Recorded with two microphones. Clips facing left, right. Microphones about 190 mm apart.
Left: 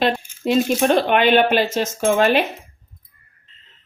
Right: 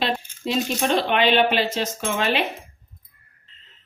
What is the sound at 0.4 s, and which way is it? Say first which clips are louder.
Speech: left 6 dB; 50° left (ahead or behind).